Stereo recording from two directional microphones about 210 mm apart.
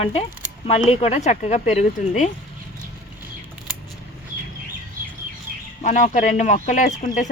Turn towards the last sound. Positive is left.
turn(degrees=35)  # may be behind; listen again after turning